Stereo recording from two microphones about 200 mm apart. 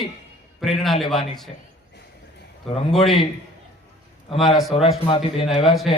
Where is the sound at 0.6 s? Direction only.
Centre (ahead or behind).